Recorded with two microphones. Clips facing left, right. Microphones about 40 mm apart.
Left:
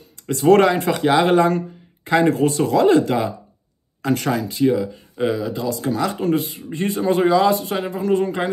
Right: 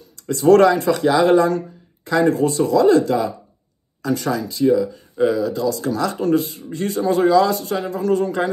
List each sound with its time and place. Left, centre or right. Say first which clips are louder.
0.1 s speech: right 1 dB; left
4.6 s speech: right 3 dB; left